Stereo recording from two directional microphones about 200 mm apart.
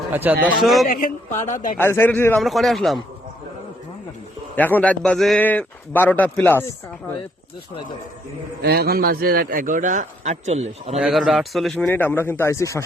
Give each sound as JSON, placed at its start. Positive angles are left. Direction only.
{"t": 0.1, "sound": "a man's voice", "side_deg": -10}
{"t": 0.9, "sound": "speech", "side_deg": 45}
{"t": 1.8, "sound": "a man's voice", "side_deg": 10}
{"t": 4.5, "sound": "a man's voice", "side_deg": 10}
{"t": 8.6, "sound": "a man's voice", "side_deg": -50}
{"t": 11.0, "sound": "a man's voice", "side_deg": 0}